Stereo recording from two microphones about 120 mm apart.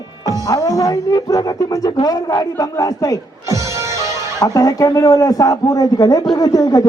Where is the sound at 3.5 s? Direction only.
25° right (ahead or behind).